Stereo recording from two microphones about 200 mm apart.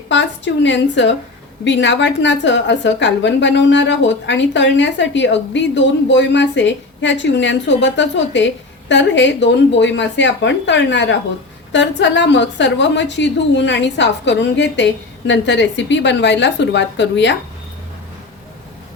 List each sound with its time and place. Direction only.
0.1 s a woman's voice: 65° left (ahead or behind)